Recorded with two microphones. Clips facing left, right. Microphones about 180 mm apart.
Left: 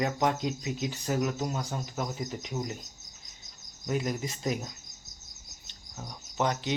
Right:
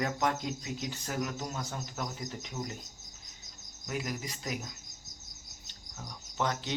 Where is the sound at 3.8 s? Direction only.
25° left (ahead or behind).